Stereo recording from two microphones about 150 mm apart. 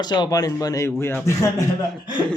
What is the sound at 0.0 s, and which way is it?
A man's voice, 30° left (ahead or behind).